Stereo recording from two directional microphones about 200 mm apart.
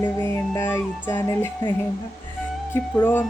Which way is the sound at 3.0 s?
10° left (ahead or behind).